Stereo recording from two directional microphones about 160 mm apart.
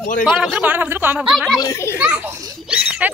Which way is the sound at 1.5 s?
20° left (ahead or behind).